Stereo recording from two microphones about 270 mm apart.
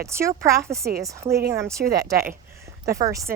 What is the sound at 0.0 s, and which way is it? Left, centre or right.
Speech, centre.